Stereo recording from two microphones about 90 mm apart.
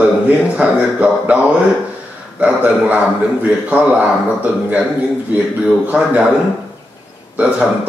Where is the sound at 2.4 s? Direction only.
15° right (ahead or behind).